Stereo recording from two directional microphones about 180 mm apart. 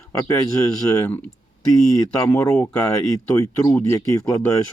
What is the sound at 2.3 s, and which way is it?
Speech, 10° left (ahead or behind).